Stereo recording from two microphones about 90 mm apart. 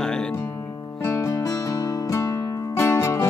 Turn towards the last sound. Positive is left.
turn(degrees=35)  # may be behind; listen again after turning